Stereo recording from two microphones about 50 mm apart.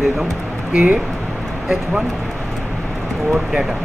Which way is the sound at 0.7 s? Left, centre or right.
Right.